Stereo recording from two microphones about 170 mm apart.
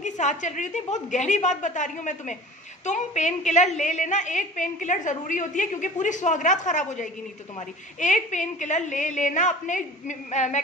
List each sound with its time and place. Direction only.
0.0 s a woman's voice: 45° left (ahead or behind)